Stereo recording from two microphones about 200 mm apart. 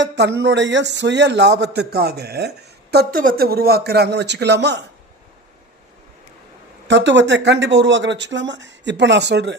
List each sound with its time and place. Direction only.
0.0 s speech: 60° right (ahead or behind)
6.8 s speech: 65° right (ahead or behind)